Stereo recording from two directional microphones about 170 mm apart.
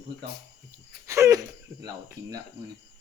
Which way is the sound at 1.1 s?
15° right (ahead or behind).